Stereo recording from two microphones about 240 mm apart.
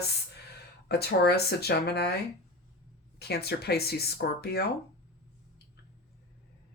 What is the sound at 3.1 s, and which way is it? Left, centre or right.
Speech, left.